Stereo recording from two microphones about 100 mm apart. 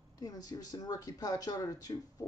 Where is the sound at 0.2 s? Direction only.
40° left (ahead or behind).